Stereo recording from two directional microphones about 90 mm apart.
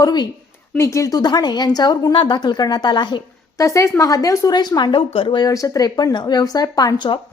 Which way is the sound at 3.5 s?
35° left (ahead or behind).